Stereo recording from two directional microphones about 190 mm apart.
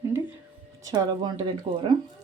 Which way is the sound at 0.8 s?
20° right (ahead or behind).